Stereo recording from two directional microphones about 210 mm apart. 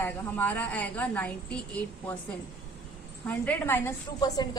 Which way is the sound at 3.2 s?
10° left (ahead or behind).